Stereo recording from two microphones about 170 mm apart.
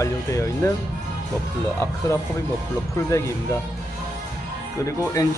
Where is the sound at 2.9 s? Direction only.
15° left (ahead or behind).